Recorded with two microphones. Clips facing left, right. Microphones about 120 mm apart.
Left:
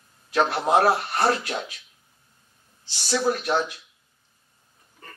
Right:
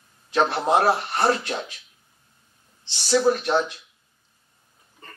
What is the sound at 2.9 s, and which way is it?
Speech, 25° right (ahead or behind).